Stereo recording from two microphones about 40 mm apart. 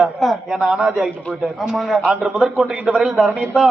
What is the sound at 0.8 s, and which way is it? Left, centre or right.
Speech, centre.